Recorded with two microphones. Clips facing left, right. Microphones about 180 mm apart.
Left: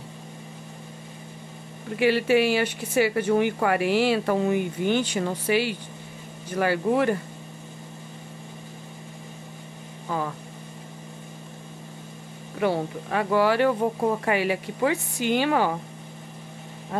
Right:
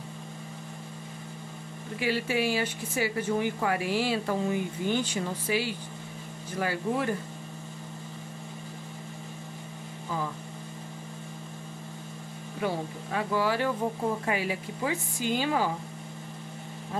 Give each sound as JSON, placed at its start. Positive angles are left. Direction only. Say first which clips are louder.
{"t": 2.0, "sound": "speech", "louder": "left 8 dB", "side_deg": 70}
{"t": 12.5, "sound": "speech", "louder": "left 6 dB", "side_deg": 70}